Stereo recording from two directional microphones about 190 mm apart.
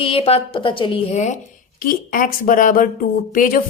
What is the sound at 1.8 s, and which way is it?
Speech, 45° left (ahead or behind).